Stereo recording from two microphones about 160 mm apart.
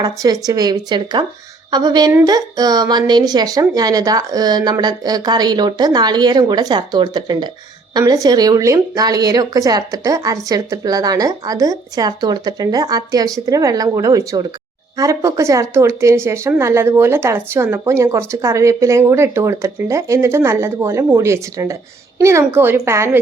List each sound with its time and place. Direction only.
0.0 s a woman's voice: 20° right (ahead or behind)